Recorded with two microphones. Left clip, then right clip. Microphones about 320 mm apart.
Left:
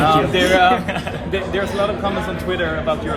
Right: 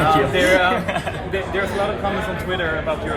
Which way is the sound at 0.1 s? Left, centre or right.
Centre.